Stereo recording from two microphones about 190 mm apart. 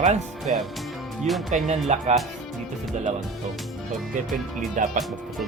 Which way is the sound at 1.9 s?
35° right (ahead or behind).